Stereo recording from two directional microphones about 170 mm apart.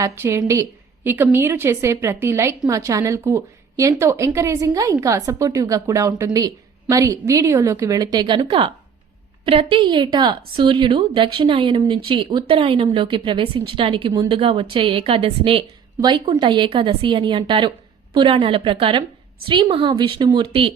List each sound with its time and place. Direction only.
0.0 s a woman's voice: 20° right (ahead or behind)